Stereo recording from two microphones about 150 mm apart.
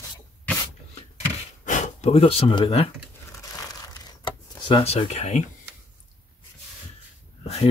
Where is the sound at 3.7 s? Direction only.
25° left (ahead or behind); by 5.4 s 50° left (ahead or behind).